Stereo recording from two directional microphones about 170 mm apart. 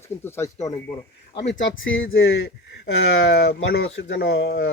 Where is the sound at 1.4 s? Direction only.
90° left.